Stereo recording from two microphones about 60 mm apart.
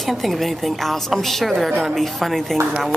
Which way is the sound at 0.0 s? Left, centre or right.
Centre.